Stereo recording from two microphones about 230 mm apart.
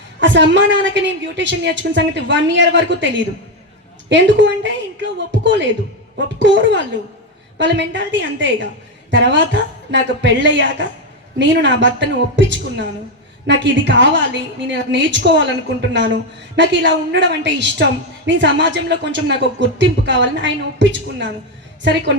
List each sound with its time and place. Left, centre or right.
0.2 s a woman's voice: right